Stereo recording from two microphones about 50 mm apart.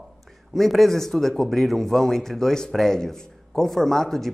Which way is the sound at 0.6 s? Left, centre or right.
Centre.